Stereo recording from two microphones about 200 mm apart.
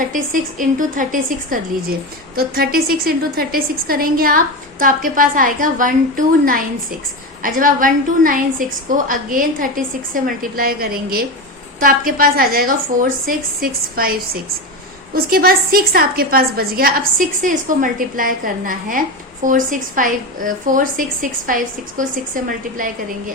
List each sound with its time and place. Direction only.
0.6 s a woman's voice: 40° right (ahead or behind)